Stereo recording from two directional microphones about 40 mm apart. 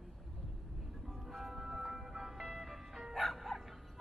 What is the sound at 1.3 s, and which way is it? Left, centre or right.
Music, centre.